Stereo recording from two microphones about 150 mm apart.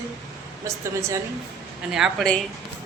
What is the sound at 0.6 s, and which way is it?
Speech, 20° right (ahead or behind).